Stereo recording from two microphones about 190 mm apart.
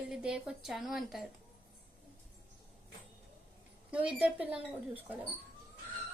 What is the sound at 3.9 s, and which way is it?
Speech, 5° right (ahead or behind).